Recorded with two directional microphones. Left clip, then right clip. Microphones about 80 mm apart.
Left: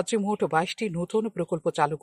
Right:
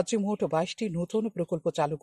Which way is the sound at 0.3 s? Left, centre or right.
Centre.